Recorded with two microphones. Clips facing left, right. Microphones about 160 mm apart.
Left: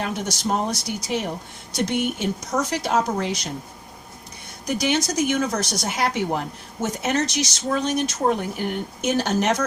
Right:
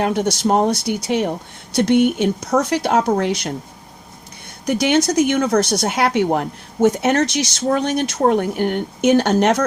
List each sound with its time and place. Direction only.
0.0 s speech: 65° right (ahead or behind)
4.6 s speech: 65° right (ahead or behind)